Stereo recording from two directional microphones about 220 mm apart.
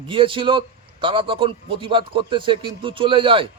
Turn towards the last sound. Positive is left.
turn(degrees=-25)  # may be behind; listen again after turning